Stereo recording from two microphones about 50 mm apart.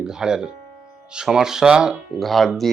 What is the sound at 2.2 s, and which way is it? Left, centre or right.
Speech, centre.